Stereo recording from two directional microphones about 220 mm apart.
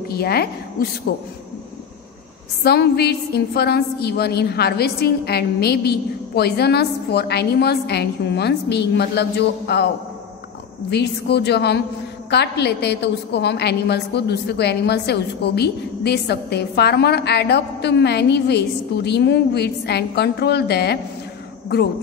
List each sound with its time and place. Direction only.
0.1 s a woman's voice: 45° left (ahead or behind)
2.6 s a woman's voice: 45° left (ahead or behind)
10.9 s a woman's voice: 50° left (ahead or behind)